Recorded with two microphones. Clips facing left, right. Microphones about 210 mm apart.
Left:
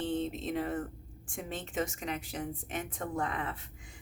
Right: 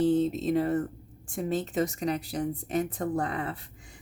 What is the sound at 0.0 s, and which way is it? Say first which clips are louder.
Speech: right 9 dB; 40° right (ahead or behind).